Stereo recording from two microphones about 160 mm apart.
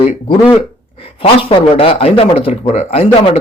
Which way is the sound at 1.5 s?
35° left (ahead or behind).